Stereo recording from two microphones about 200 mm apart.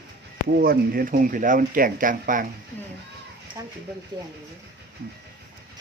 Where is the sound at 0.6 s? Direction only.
50° right (ahead or behind).